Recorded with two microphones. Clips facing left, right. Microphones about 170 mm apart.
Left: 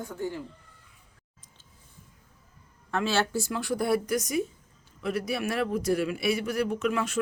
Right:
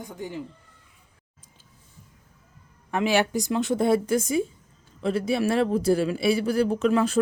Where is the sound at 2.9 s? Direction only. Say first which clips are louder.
Right 4 dB; 15° right (ahead or behind).